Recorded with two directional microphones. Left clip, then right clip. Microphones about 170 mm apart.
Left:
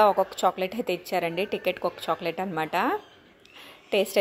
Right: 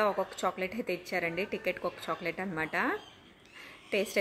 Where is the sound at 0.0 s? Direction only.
20° left (ahead or behind).